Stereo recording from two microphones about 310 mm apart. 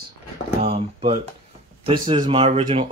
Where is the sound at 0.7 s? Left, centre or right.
Centre.